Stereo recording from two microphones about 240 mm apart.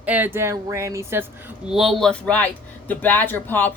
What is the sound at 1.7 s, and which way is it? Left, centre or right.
Speech, centre.